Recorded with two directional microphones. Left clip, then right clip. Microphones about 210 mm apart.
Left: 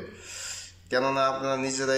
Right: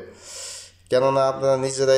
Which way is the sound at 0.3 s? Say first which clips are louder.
Right 2 dB; 35° right (ahead or behind).